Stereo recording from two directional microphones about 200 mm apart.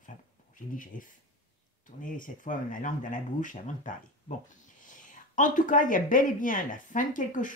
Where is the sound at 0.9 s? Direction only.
40° left (ahead or behind).